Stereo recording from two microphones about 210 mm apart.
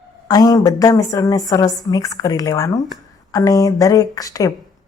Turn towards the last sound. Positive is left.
turn(degrees=15)  # may be behind; listen again after turning